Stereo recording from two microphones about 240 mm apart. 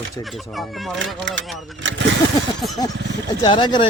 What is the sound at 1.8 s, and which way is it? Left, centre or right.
Speech, right.